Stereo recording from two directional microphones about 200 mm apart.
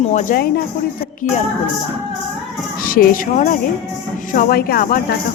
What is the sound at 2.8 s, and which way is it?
Speech, 45° left (ahead or behind).